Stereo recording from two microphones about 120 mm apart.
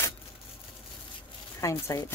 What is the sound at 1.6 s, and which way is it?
Speech, 25° left (ahead or behind).